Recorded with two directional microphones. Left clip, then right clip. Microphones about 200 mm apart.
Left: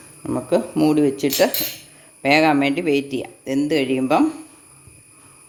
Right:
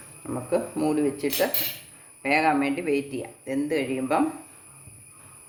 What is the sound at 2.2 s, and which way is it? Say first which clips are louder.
Speech: left 6 dB; 50° left (ahead or behind).